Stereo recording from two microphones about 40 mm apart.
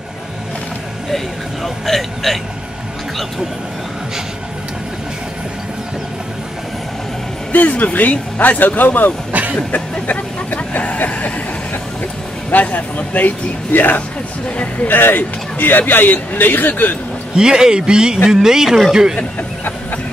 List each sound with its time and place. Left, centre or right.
1.1 s speech: centre
7.5 s speech: left
9.3 s vehicle: right
9.7 s vehicle: left
12.4 s speech: left
13.7 s speech: left
17.4 s a man's voice: centre